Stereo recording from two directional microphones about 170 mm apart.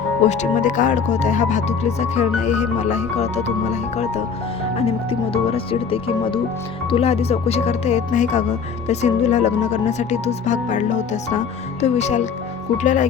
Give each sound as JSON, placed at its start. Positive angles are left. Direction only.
{"t": 0.3, "sound": "speech", "side_deg": 45}